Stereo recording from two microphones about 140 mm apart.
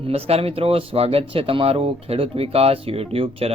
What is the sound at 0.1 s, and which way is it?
Speech, 45° right (ahead or behind).